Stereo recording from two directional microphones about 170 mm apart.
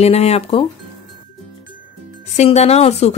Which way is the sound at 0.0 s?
40° left (ahead or behind).